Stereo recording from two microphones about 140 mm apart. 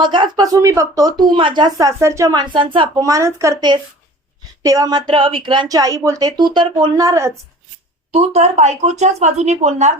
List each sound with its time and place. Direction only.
0.0 s speech: 35° right (ahead or behind)
2.0 s speech: 20° right (ahead or behind); by 2.9 s 35° right (ahead or behind)
3.0 s speech: 25° right (ahead or behind)
8.1 s speech: 50° right (ahead or behind)